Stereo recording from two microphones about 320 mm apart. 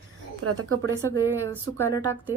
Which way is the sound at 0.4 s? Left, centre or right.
Right.